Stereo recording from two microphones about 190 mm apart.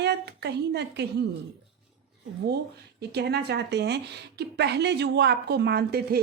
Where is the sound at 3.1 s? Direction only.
60° right (ahead or behind).